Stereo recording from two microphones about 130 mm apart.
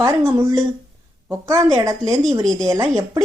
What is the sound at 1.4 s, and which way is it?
Speech, 25° right (ahead or behind).